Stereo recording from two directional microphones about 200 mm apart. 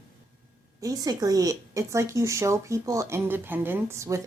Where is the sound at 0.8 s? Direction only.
20° right (ahead or behind).